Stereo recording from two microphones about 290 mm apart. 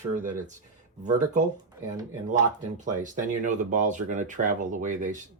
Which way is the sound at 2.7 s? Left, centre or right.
Right.